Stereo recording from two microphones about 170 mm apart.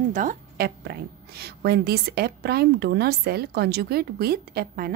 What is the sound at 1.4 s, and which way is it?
A woman's voice, 70° right (ahead or behind).